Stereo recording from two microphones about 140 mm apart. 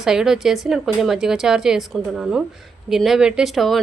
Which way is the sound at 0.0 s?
5° right (ahead or behind).